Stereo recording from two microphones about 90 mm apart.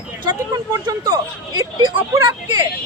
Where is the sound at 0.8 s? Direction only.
45° right (ahead or behind).